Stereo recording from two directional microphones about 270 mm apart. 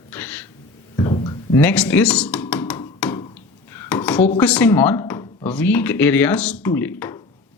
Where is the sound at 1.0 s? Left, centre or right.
Centre.